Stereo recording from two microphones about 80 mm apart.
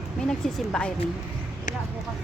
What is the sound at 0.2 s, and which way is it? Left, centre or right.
Speech, centre.